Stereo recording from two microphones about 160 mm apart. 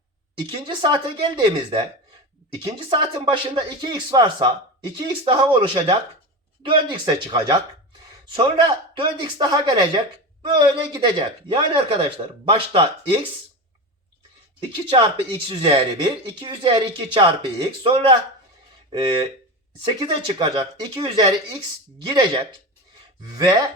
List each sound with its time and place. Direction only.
0.3 s speech: 30° right (ahead or behind)
14.7 s speech: 30° right (ahead or behind)